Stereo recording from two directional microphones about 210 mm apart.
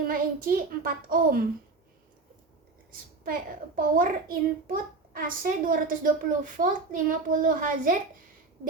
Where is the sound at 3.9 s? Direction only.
40° right (ahead or behind).